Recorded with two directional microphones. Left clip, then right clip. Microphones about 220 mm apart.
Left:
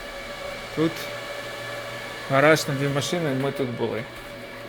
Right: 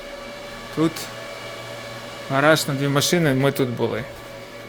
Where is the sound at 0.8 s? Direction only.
20° right (ahead or behind).